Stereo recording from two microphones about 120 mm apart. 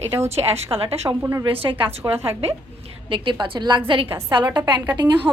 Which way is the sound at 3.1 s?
45° right (ahead or behind).